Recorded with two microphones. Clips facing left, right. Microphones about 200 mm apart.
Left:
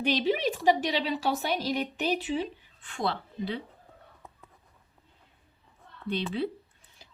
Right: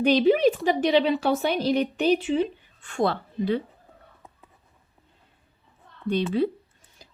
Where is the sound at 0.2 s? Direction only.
50° right (ahead or behind).